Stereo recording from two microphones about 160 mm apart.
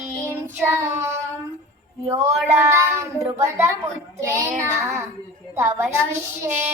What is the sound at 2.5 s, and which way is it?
Child singing, 20° right (ahead or behind).